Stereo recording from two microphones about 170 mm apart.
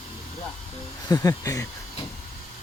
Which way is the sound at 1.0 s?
20° left (ahead or behind).